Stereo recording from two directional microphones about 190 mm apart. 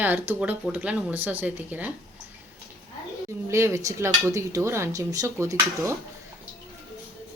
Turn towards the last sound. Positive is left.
turn(degrees=-15)  # may be behind; listen again after turning